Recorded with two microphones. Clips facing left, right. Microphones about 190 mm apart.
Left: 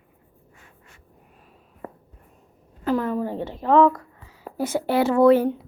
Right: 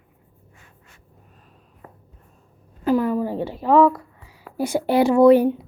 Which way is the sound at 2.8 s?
10° right (ahead or behind).